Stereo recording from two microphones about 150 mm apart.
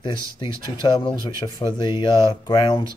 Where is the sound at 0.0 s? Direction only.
30° left (ahead or behind).